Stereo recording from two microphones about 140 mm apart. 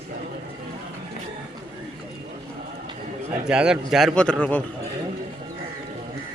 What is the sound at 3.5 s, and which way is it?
Speech, 5° right (ahead or behind).